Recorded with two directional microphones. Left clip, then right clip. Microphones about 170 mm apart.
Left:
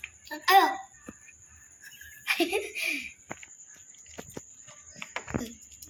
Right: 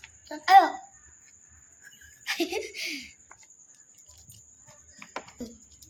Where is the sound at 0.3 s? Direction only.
70° right (ahead or behind).